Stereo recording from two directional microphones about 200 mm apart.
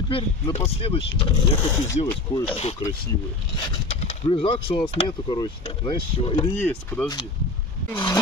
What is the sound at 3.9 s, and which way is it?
Speech, 30° left (ahead or behind).